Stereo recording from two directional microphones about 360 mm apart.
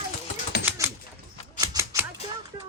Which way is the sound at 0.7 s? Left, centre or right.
Centre.